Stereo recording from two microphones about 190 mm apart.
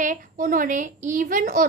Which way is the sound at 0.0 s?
40° right (ahead or behind).